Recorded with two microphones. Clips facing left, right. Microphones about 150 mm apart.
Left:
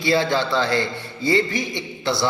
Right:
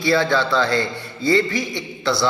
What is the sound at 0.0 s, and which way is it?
A man's voice, 20° left (ahead or behind).